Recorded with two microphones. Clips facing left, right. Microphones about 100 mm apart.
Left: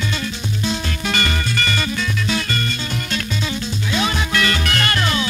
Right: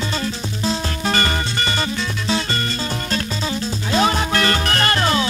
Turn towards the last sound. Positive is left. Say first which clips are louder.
# right 2 dB
turn(degrees=-30)  # may be behind; listen again after turning